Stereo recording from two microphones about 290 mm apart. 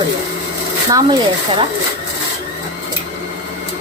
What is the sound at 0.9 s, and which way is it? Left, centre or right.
Speech, centre.